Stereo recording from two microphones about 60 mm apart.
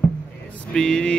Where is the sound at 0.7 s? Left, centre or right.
Centre.